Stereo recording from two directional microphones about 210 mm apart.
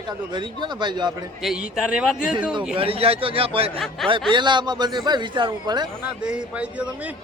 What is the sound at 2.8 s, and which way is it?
A man's voice, 25° right (ahead or behind).